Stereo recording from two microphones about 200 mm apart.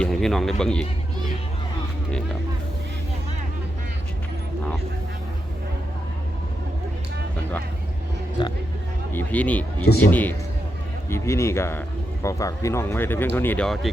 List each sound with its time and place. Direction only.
0.0 s speech: centre (ahead or behind)
8.4 s speech: 25° left (ahead or behind)
9.1 s speech: 5° left (ahead or behind)